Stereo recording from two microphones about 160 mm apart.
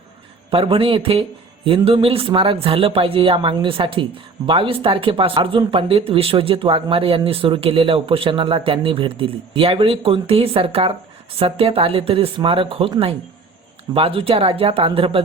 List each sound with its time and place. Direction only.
0.5 s speech: 35° right (ahead or behind)